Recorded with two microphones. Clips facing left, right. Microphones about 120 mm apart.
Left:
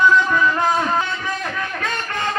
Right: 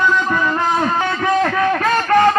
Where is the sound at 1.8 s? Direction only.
55° right (ahead or behind).